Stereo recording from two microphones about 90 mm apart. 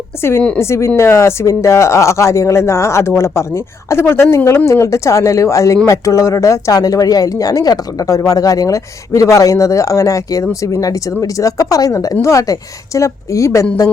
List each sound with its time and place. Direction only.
0.2 s a woman's voice: 30° left (ahead or behind)